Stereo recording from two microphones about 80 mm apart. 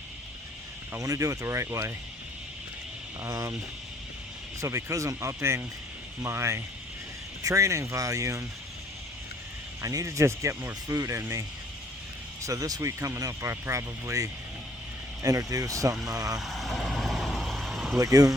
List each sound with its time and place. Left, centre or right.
0.9 s speech: right
3.2 s speech: right
4.6 s speech: right
9.8 s speech: right
16.4 s vehicle: centre
17.9 s speech: right